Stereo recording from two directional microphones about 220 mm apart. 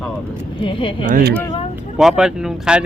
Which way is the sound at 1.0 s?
40° right (ahead or behind).